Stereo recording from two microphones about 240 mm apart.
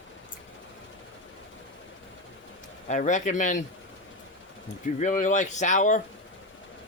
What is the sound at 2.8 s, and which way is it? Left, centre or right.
Speech, left.